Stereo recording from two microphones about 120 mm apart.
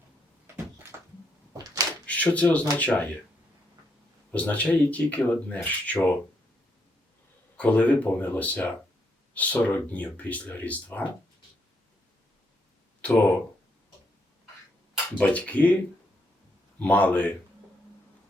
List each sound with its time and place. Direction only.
0.4 s a sound: 25° right (ahead or behind)
2.0 s speech: 10° left (ahead or behind)
4.3 s speech: 10° left (ahead or behind)
7.5 s speech: 10° left (ahead or behind)
13.0 s speech: 10° left (ahead or behind)
15.2 s speech: 10° left (ahead or behind)
16.8 s speech: 10° left (ahead or behind)